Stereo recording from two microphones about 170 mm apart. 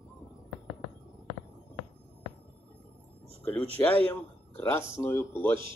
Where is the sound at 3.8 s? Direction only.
10° left (ahead or behind).